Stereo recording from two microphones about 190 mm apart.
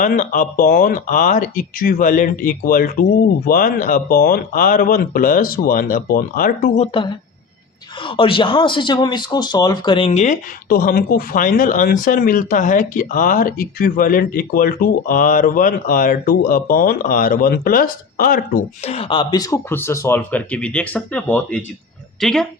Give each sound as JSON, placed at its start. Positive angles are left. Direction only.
{"t": 0.0, "sound": "speech", "side_deg": 45}
{"t": 8.0, "sound": "speech", "side_deg": 25}
{"t": 10.7, "sound": "speech", "side_deg": 50}
{"t": 18.8, "sound": "speech", "side_deg": 30}